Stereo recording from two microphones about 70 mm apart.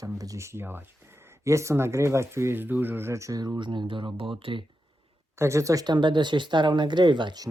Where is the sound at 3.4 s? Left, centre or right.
Right.